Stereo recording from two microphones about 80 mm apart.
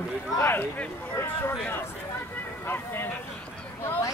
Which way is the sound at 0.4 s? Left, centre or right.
Left.